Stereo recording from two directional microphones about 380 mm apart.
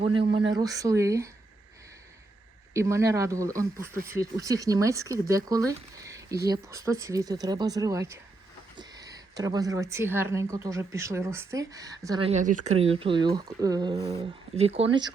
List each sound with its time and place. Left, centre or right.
0.0 s a woman's voice: centre
2.7 s a woman's voice: centre